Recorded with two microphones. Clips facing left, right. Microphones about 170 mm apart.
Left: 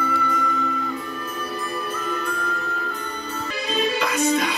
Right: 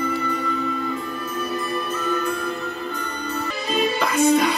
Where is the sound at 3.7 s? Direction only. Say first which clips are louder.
Right 2 dB; 50° right (ahead or behind).